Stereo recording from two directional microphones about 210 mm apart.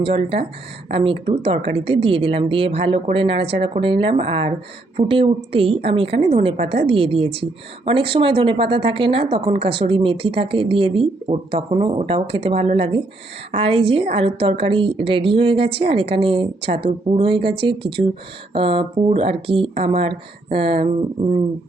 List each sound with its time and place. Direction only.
0.0 s speech: 25° right (ahead or behind)